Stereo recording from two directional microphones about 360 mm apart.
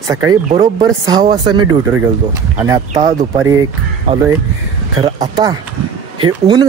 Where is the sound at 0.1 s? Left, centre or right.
Centre.